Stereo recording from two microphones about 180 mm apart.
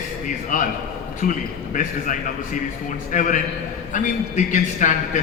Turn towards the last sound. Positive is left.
turn(degrees=45)  # may be behind; listen again after turning